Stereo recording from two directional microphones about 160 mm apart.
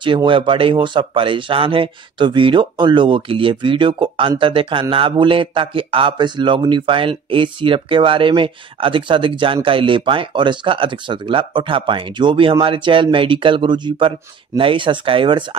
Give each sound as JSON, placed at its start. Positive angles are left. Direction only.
{"t": 0.0, "sound": "speech", "side_deg": -30}